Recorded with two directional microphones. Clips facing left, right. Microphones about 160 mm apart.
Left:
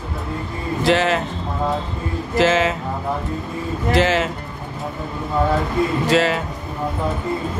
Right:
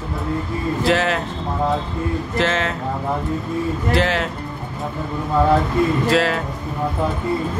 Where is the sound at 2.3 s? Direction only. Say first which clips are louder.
Left 6 dB; centre (ahead or behind).